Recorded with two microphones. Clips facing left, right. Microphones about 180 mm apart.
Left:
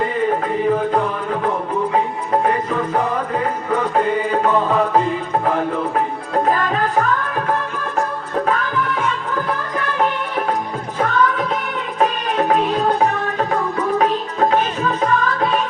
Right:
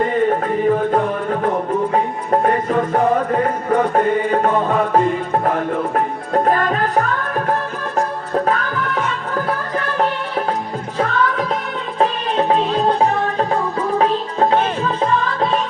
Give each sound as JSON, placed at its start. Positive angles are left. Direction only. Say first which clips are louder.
{"t": 0.0, "sound": "music", "louder": "right 2 dB", "side_deg": -45}
{"t": 2.4, "sound": "music", "louder": "right 4 dB", "side_deg": -45}
{"t": 6.3, "sound": "music", "louder": "right 2 dB", "side_deg": -45}
{"t": 8.4, "sound": "music", "louder": "even", "side_deg": -45}